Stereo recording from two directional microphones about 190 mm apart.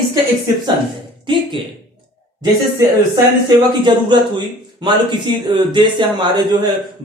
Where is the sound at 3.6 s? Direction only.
25° right (ahead or behind).